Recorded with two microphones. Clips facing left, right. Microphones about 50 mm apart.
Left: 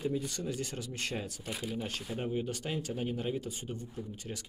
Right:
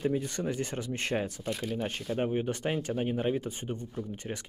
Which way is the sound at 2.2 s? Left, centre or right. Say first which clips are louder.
Right 6 dB; right.